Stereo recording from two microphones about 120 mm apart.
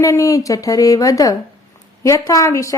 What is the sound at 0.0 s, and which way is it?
Speech, 25° left (ahead or behind).